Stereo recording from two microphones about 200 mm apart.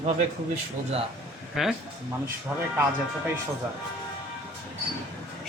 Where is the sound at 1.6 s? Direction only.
5° right (ahead or behind).